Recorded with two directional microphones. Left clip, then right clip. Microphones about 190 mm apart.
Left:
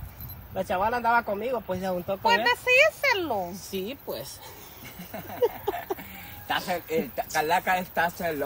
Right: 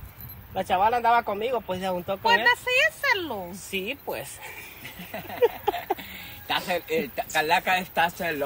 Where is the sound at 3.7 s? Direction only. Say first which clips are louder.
Right 3 dB; 20° right (ahead or behind).